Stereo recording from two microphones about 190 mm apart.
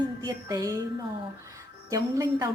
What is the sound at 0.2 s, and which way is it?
Speech, 20° right (ahead or behind).